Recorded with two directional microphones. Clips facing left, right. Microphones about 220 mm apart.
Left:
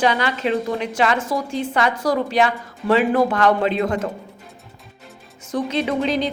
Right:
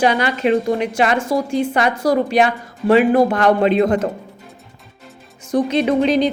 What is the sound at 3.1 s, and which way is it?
Speech, 40° right (ahead or behind).